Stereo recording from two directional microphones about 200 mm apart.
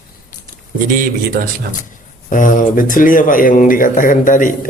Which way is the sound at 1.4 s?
55° right (ahead or behind).